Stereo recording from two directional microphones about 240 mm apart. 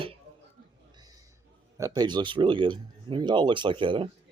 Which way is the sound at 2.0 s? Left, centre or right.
Centre.